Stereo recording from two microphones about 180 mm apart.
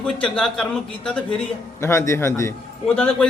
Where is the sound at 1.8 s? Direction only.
15° left (ahead or behind).